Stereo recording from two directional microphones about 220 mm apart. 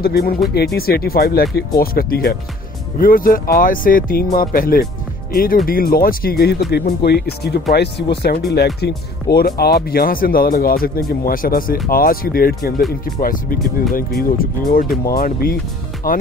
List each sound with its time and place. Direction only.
0.0 s speech: 45° left (ahead or behind)